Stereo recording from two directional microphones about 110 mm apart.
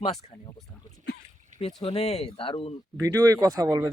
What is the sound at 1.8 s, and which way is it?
Speech, 70° left (ahead or behind).